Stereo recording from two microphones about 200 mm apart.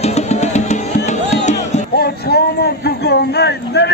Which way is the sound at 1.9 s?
50° left (ahead or behind).